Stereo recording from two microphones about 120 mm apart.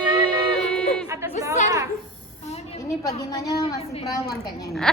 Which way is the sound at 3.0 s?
30° left (ahead or behind).